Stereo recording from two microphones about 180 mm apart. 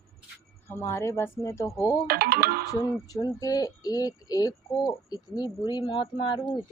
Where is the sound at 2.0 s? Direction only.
60° right (ahead or behind).